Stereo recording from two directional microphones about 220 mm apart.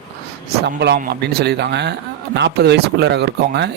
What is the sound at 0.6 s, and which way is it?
A man's voice, 50° right (ahead or behind).